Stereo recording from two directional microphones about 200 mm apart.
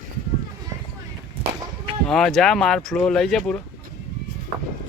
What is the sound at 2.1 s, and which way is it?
Speech, centre (ahead or behind).